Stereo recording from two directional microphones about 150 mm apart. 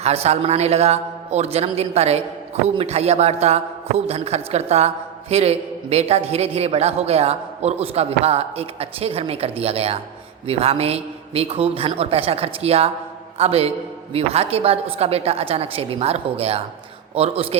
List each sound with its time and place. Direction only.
0.0 s a man's voice: 45° right (ahead or behind)